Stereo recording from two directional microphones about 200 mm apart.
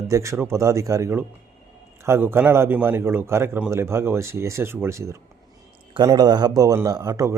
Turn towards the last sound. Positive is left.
turn(degrees=-15)  # may be behind; listen again after turning